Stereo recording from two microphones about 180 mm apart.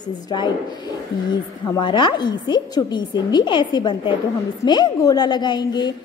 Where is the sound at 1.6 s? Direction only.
25° left (ahead or behind).